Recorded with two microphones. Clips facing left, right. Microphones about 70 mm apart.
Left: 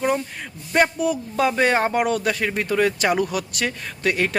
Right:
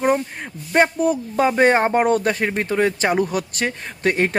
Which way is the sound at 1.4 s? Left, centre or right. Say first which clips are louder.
Right 3 dB; right.